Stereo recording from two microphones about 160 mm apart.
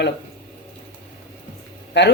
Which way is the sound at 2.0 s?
90° left.